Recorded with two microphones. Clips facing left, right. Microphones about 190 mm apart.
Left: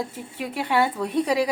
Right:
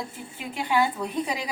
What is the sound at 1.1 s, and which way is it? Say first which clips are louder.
Speech: left 7 dB; 70° left (ahead or behind).